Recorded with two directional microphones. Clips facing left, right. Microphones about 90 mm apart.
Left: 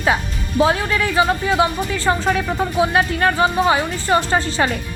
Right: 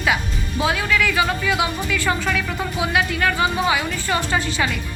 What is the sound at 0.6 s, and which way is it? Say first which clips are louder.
A woman's voice: left 3 dB; 35° left (ahead or behind).